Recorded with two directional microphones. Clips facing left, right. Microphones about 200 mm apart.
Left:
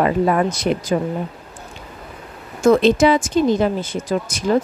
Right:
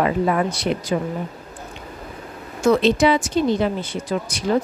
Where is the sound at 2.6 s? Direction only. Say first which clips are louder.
Left 3 dB; 50° left (ahead or behind).